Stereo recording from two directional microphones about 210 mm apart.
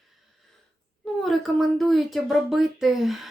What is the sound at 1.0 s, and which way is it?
Speech, centre (ahead or behind).